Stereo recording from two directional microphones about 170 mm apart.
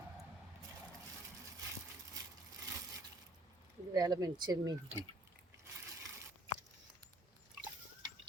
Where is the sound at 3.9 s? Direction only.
20° right (ahead or behind).